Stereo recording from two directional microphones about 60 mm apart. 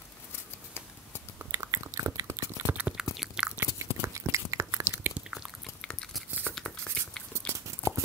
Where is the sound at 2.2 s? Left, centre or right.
Right.